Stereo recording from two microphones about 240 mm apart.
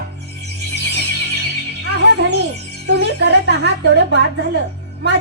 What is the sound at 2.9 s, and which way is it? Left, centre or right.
Speech, right.